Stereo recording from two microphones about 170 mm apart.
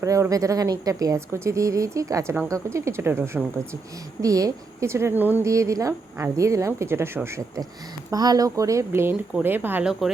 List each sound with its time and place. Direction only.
0.0 s a woman's voice: 20° right (ahead or behind); by 10.1 s 5° right (ahead or behind)